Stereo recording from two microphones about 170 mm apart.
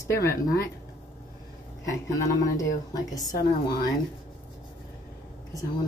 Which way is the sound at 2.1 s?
20° left (ahead or behind).